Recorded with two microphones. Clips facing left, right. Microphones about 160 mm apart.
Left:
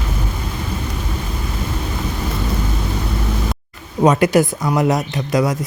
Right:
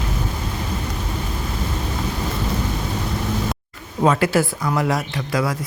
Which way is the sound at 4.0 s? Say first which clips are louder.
Left 4 dB; 20° left (ahead or behind).